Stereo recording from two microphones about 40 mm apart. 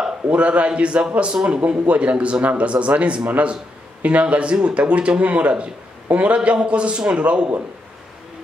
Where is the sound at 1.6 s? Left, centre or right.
Right.